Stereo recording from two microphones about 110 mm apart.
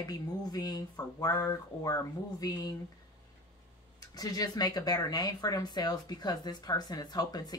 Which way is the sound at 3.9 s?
35° left (ahead or behind).